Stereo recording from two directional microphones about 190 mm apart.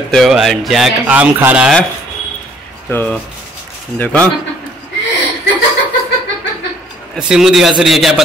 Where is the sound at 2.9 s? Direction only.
10° left (ahead or behind).